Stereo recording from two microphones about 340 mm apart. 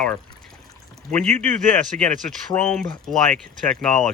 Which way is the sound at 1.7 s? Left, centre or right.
Centre.